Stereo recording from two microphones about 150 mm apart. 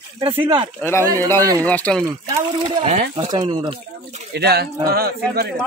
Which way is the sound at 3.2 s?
25° right (ahead or behind).